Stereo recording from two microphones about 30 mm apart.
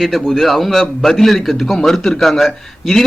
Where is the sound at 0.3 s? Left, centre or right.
Centre.